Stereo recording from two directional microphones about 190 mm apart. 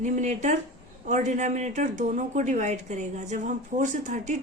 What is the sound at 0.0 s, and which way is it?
Speech, 40° right (ahead or behind).